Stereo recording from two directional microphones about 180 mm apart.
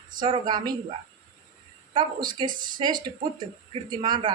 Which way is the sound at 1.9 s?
25° right (ahead or behind).